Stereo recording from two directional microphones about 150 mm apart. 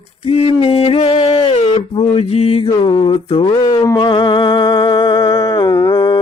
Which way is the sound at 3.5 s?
30° left (ahead or behind).